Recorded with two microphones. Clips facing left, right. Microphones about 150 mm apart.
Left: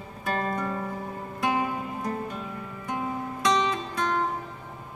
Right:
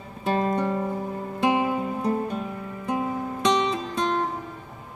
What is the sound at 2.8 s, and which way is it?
Music, 30° right (ahead or behind).